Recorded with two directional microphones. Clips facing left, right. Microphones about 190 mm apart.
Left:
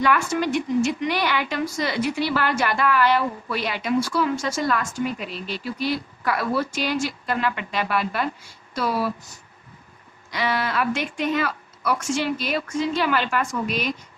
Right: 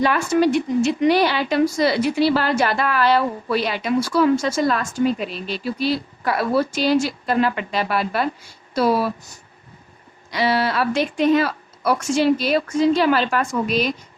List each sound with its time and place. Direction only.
0.0 s speech: 35° right (ahead or behind)
10.3 s speech: 35° right (ahead or behind)